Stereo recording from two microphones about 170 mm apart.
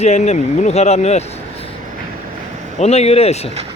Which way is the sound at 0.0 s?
40° left (ahead or behind).